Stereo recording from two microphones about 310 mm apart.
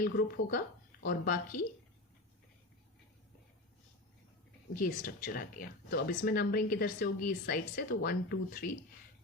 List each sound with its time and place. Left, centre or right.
0.0 s speech: left
4.7 s speech: left